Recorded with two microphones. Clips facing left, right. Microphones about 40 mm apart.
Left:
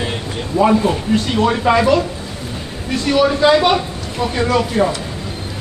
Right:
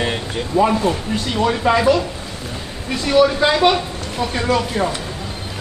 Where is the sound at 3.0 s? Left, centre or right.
Centre.